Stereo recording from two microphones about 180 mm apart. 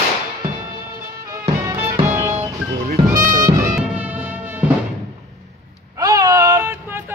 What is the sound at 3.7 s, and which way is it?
Music, 5° right (ahead or behind).